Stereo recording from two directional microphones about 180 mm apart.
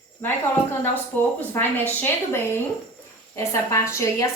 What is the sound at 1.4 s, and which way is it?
A woman's voice, 10° left (ahead or behind).